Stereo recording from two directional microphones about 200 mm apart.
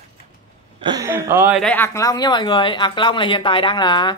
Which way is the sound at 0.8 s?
20° right (ahead or behind).